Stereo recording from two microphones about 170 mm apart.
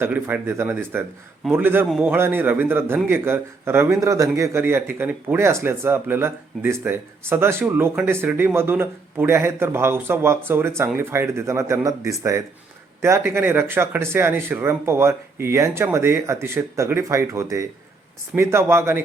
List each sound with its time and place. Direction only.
0.0 s a man's voice: 10° right (ahead or behind)